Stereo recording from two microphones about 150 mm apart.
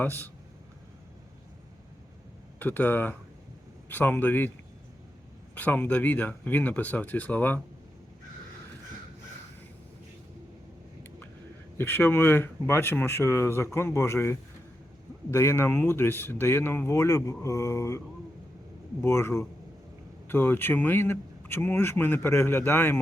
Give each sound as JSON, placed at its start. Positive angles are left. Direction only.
{"t": 0.0, "sound": "speech", "side_deg": 10}
{"t": 2.6, "sound": "speech", "side_deg": 10}
{"t": 5.5, "sound": "speech", "side_deg": 10}
{"t": 11.8, "sound": "speech", "side_deg": 15}
{"t": 19.0, "sound": "speech", "side_deg": 15}